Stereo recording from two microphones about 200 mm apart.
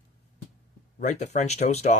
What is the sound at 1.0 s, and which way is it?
Speech, 35° left (ahead or behind).